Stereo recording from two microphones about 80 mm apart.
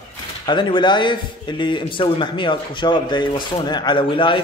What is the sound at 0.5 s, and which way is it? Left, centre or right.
A man's voice, left.